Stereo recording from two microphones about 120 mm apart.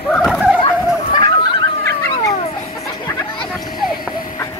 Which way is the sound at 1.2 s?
40° left (ahead or behind).